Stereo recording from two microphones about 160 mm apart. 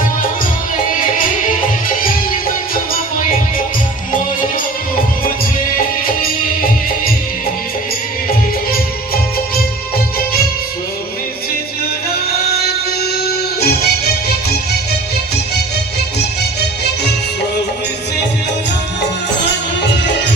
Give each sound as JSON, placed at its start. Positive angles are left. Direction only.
{"t": 13.2, "sound": "music", "side_deg": 75}